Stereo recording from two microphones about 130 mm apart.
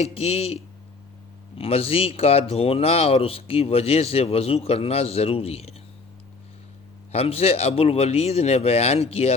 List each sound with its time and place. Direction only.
0.0 s speech: 55° left (ahead or behind)
7.1 s speech: 50° left (ahead or behind)